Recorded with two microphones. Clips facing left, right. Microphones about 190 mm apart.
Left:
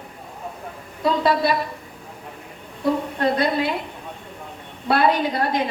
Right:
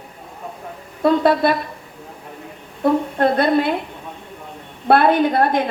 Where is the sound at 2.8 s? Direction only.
55° right (ahead or behind).